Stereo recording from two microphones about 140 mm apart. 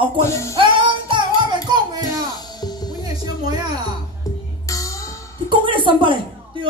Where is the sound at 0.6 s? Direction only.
35° right (ahead or behind).